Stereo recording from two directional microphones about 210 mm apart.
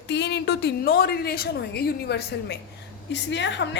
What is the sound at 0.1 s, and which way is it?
A woman's voice, 55° left (ahead or behind).